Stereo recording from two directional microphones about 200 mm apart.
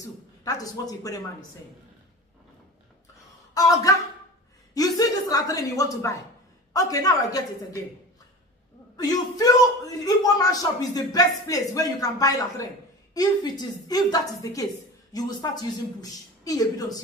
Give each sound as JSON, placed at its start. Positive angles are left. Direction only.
{"t": 0.4, "sound": "speech", "side_deg": 15}
{"t": 3.5, "sound": "a woman's voice", "side_deg": 15}
{"t": 8.9, "sound": "a man's voice", "side_deg": 20}